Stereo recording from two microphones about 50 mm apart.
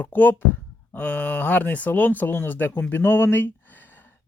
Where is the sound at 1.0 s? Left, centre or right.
Left.